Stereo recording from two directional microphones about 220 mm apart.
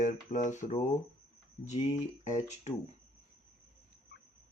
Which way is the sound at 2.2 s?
35° left (ahead or behind).